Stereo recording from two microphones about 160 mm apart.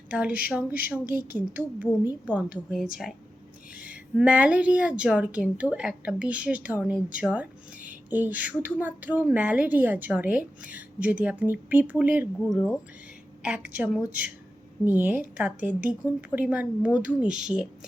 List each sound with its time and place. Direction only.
0.1 s a woman's voice: 10° right (ahead or behind)
12.4 s a woman's voice: 5° left (ahead or behind)